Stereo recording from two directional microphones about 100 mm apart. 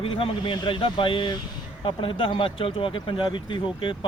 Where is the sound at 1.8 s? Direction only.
60° left (ahead or behind).